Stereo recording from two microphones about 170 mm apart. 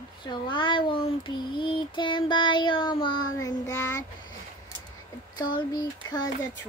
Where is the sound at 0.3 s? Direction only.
30° left (ahead or behind).